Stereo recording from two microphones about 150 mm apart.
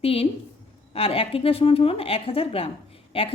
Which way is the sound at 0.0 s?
40° left (ahead or behind).